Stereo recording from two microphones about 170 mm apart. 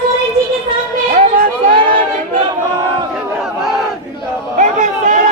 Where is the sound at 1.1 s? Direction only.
55° right (ahead or behind).